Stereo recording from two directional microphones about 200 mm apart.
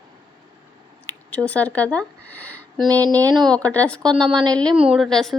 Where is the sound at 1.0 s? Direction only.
5° left (ahead or behind).